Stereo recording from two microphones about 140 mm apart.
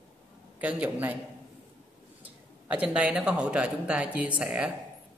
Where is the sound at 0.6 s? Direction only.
10° right (ahead or behind).